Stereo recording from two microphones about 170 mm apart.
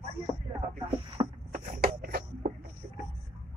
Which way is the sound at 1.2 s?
25° right (ahead or behind).